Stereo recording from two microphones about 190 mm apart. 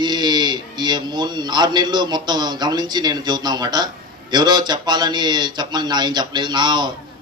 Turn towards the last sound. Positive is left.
turn(degrees=-25)  # may be behind; listen again after turning